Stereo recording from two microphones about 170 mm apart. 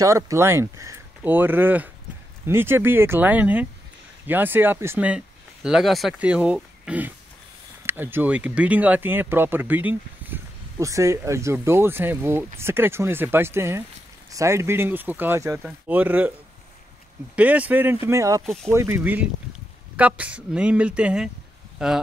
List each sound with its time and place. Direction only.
0.0 s speech: 20° right (ahead or behind)
17.4 s speech: 10° right (ahead or behind)
18.4 s speech: centre (ahead or behind)
18.7 s speech: 15° right (ahead or behind)